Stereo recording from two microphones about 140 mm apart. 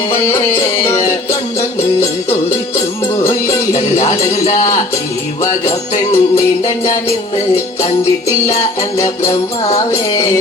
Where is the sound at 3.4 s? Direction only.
55° left (ahead or behind).